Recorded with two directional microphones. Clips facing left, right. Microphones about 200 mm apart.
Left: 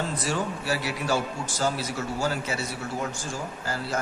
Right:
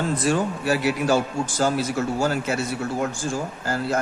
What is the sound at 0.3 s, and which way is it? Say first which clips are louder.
A man's voice: right 7 dB; 50° right (ahead or behind).